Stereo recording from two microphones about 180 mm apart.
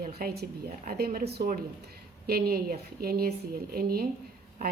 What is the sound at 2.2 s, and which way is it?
A woman's voice, 55° right (ahead or behind).